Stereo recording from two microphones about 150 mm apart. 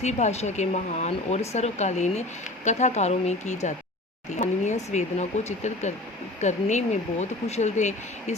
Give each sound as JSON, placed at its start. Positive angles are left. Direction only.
{"t": 0.0, "sound": "speech", "side_deg": 50}